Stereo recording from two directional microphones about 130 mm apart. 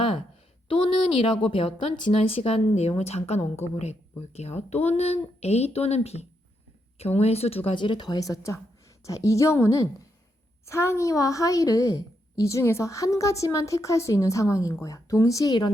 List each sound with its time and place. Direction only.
0.7 s a woman's voice: 45° left (ahead or behind); by 15.7 s 30° left (ahead or behind)